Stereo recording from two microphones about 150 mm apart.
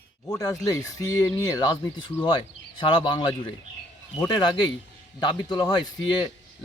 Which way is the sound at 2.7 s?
30° left (ahead or behind).